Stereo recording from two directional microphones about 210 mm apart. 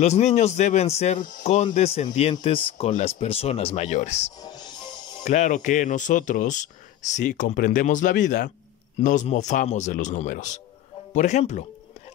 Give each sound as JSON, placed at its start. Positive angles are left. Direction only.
{"t": 0.0, "sound": "speech", "side_deg": 30}
{"t": 4.4, "sound": "music", "side_deg": 20}
{"t": 5.2, "sound": "speech", "side_deg": 35}